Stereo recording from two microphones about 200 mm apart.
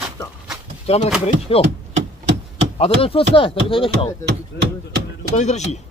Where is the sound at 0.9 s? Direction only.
30° left (ahead or behind).